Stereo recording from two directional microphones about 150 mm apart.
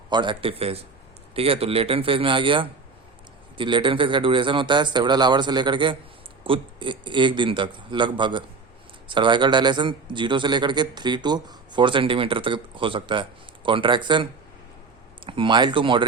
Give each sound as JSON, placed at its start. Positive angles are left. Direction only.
{"t": 0.1, "sound": "a man's voice", "side_deg": -30}
{"t": 15.3, "sound": "a man's voice", "side_deg": -35}